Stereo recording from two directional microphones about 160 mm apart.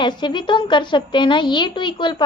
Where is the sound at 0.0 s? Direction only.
30° left (ahead or behind).